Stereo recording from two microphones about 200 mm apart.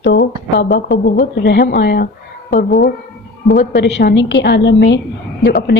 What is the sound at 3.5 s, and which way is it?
A woman's voice, 60° left (ahead or behind).